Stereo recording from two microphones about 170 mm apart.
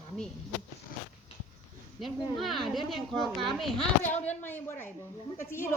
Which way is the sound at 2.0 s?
Centre (ahead or behind).